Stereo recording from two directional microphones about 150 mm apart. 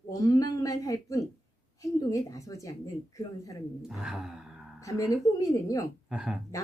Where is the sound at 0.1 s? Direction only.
25° left (ahead or behind).